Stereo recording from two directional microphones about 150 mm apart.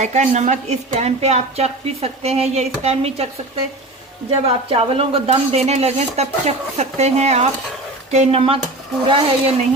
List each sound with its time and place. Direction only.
0.0 s a woman's voice: 50° right (ahead or behind)
4.3 s a woman's voice: 40° right (ahead or behind)